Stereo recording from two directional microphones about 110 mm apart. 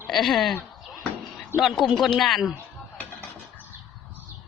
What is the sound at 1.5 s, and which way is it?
Speech, 25° right (ahead or behind).